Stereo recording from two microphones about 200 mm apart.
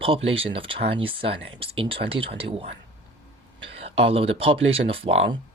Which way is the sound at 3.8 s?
30° right (ahead or behind).